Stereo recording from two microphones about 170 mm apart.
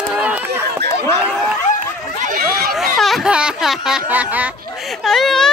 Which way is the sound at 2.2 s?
55° right (ahead or behind).